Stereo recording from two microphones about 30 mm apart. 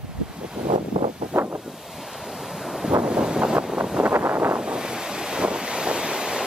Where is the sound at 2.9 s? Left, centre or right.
Right.